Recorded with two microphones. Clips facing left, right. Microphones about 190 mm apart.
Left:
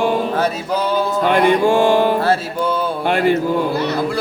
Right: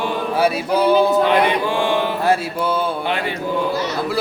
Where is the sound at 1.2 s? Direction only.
45° left (ahead or behind).